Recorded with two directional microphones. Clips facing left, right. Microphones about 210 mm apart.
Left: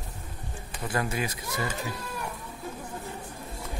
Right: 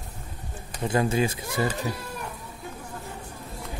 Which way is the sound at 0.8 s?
25° right (ahead or behind).